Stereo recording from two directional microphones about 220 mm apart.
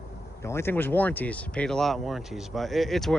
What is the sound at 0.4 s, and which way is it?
Speech, 10° left (ahead or behind).